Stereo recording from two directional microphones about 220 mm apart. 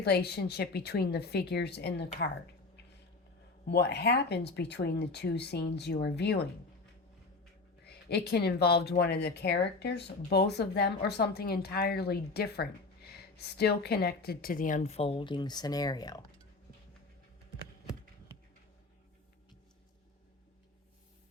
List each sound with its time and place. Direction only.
0.0 s speech: 50° left (ahead or behind)
3.7 s speech: 50° left (ahead or behind)
7.9 s speech: 50° left (ahead or behind); by 16.2 s 15° left (ahead or behind)